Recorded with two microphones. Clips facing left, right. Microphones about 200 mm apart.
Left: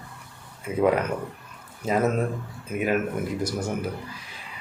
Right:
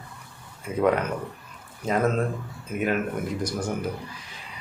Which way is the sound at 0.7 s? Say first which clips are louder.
Left 1 dB; 10° left (ahead or behind).